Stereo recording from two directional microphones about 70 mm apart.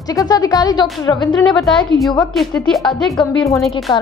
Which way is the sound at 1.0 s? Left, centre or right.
Left.